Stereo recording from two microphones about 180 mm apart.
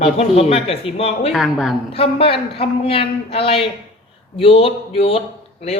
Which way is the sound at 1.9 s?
35° left (ahead or behind).